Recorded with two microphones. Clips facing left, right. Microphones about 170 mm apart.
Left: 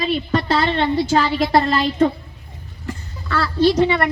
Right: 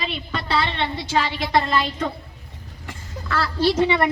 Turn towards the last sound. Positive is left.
turn(degrees=30)  # may be behind; listen again after turning